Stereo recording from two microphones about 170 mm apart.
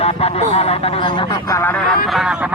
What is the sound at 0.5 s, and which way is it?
Speech, 35° left (ahead or behind).